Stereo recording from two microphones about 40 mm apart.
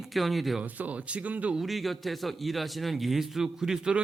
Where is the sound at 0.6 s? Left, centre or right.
Right.